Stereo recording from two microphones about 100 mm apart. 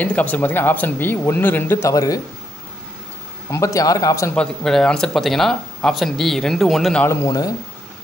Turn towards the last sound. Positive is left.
turn(degrees=30)  # may be behind; listen again after turning